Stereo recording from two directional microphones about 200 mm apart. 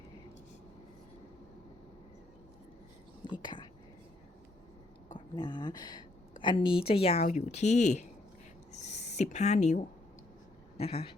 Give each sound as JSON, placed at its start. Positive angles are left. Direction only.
{"t": 3.2, "sound": "speech", "side_deg": 25}
{"t": 5.4, "sound": "speech", "side_deg": 20}
{"t": 6.6, "sound": "speech", "side_deg": -5}
{"t": 6.8, "sound": "speech", "side_deg": 30}
{"t": 8.7, "sound": "a sound", "side_deg": 35}
{"t": 10.8, "sound": "speech", "side_deg": 30}